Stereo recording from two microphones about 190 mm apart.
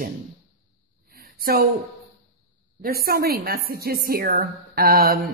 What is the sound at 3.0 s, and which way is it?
Speech, 55° right (ahead or behind).